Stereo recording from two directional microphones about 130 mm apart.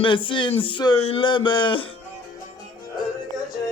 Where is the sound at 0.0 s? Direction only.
40° left (ahead or behind).